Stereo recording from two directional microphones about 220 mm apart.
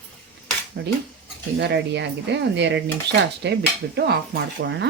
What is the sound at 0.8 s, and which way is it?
Speech, 50° right (ahead or behind).